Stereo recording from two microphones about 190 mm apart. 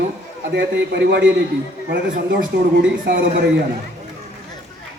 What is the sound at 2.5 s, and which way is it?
Speech, 60° right (ahead or behind).